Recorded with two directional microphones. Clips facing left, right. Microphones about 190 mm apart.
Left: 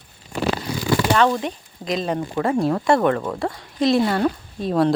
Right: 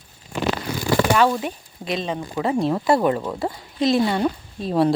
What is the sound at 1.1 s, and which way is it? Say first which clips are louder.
Speech: even; 5° right (ahead or behind).